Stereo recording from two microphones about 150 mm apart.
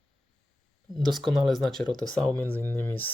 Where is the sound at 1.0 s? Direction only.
Centre (ahead or behind).